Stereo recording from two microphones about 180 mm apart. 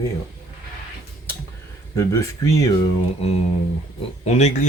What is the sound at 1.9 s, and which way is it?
Speech, 15° left (ahead or behind).